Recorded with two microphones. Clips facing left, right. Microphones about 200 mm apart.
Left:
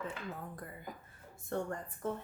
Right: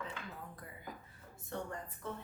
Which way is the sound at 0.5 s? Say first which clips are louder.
Left 3 dB; 50° left (ahead or behind).